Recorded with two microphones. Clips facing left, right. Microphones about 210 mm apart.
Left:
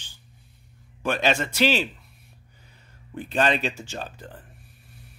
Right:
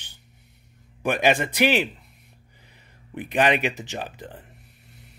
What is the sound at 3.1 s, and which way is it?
Speech, 15° right (ahead or behind).